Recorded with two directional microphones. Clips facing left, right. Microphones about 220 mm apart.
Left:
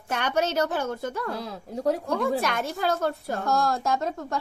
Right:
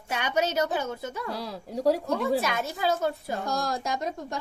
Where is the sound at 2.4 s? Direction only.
5° right (ahead or behind).